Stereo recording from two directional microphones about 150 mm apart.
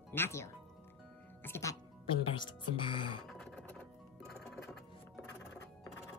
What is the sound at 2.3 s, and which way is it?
Speech, 35° left (ahead or behind).